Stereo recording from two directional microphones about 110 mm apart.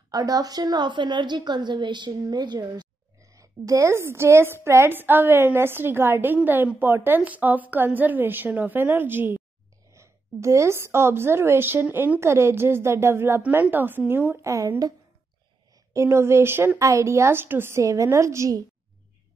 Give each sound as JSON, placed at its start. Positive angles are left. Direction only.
{"t": 0.1, "sound": "a woman's voice", "side_deg": -35}